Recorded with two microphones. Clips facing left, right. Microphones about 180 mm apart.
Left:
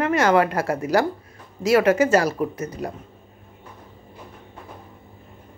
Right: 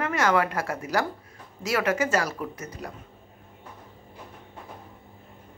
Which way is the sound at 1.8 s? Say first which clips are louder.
Left 7 dB; 30° left (ahead or behind).